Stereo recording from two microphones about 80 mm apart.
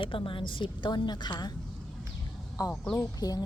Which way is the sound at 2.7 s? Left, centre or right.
Centre.